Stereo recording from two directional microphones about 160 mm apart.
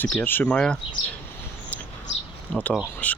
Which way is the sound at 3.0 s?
10° left (ahead or behind).